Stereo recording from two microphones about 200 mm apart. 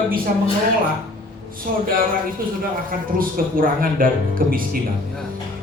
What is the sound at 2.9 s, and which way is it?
Speech, 45° right (ahead or behind).